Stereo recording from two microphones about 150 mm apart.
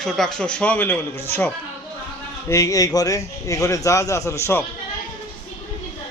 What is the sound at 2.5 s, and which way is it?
A man's voice, 20° left (ahead or behind).